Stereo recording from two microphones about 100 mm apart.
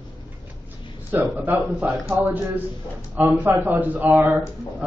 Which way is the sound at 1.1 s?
20° right (ahead or behind).